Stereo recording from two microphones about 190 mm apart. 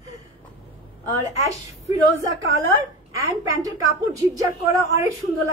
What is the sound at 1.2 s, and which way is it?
Speech, 15° right (ahead or behind).